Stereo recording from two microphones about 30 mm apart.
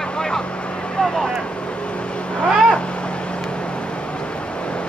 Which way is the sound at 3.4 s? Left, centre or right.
Left.